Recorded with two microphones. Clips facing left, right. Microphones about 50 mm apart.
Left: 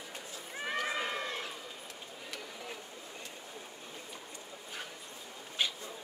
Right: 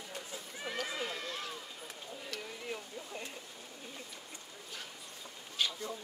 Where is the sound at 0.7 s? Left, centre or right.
Left.